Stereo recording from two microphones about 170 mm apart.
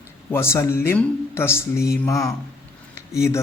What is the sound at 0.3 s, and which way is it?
Speech, 15° left (ahead or behind).